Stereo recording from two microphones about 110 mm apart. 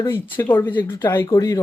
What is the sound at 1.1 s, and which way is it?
Speech, 30° left (ahead or behind).